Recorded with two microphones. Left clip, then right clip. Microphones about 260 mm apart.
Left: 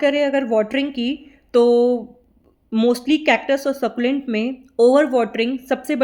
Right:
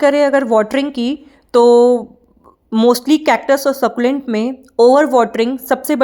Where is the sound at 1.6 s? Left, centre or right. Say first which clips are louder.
Right 6 dB; centre.